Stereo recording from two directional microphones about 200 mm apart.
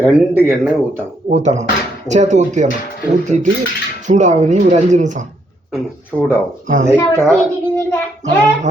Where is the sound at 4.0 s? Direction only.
35° right (ahead or behind).